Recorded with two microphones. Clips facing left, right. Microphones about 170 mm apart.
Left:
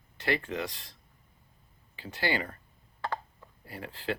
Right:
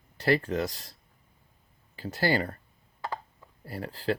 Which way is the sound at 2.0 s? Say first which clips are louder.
Right 5 dB; 40° right (ahead or behind).